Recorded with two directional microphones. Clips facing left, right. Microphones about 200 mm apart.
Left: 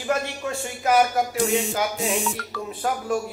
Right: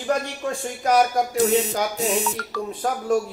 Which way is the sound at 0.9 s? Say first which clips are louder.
Right 1 dB; 5° left (ahead or behind).